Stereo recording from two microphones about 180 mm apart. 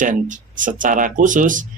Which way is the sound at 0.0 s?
45° right (ahead or behind).